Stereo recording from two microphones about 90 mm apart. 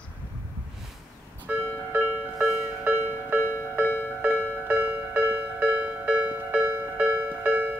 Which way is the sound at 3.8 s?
20° left (ahead or behind).